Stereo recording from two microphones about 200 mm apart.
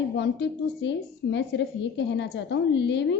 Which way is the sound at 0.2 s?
60° left (ahead or behind).